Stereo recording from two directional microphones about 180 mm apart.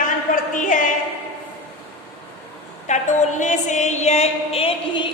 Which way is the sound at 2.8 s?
40° left (ahead or behind).